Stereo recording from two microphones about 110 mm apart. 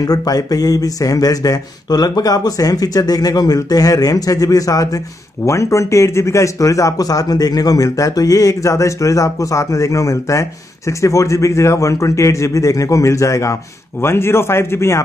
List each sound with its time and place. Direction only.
0.0 s speech: 35° left (ahead or behind)